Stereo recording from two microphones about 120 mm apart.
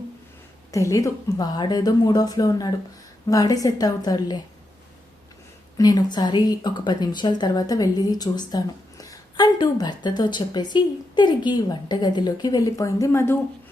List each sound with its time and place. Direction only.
0.7 s speech: 25° left (ahead or behind)
5.7 s speech: 35° left (ahead or behind)